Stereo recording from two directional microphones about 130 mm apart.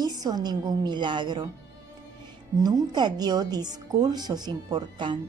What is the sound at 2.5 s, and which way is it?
A woman's voice, 30° right (ahead or behind).